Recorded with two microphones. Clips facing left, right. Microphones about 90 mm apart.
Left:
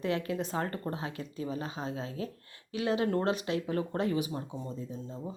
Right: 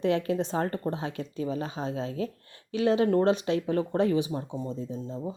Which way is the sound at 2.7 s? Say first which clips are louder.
Right 6 dB; 30° right (ahead or behind).